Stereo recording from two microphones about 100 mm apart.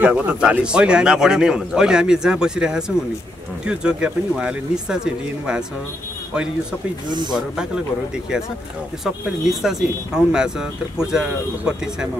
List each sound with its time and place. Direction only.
0.0 s speech: 10° right (ahead or behind)
7.1 s speech: 50° right (ahead or behind)
7.3 s speech: 10° right (ahead or behind)
9.0 s speech: 5° right (ahead or behind)